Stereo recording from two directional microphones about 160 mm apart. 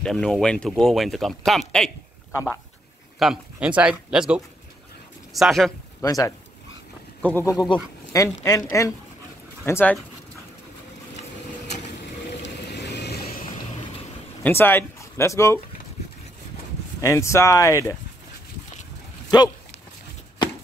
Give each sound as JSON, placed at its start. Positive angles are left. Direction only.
{"t": 0.0, "sound": "speech", "side_deg": 5}
{"t": 3.2, "sound": "speech", "side_deg": -5}
{"t": 6.0, "sound": "speech", "side_deg": 20}
{"t": 7.2, "sound": "speech", "side_deg": 10}
{"t": 7.4, "sound": "speech", "side_deg": 25}
{"t": 12.4, "sound": "vehicle", "side_deg": 90}
{"t": 14.4, "sound": "speech", "side_deg": 10}
{"t": 17.0, "sound": "speech", "side_deg": 20}
{"t": 19.3, "sound": "speech", "side_deg": 25}